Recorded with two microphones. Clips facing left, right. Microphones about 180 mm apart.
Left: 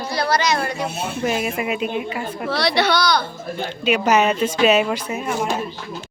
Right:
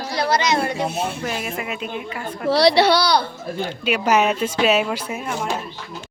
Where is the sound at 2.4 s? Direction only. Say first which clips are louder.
Right 5 dB; 35° right (ahead or behind).